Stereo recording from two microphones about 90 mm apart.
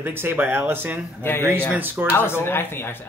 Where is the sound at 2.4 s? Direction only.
25° left (ahead or behind).